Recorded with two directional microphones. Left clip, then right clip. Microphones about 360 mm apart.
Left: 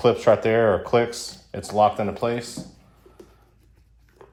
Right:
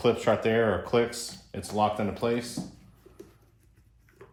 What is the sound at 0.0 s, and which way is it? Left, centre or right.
Speech, centre.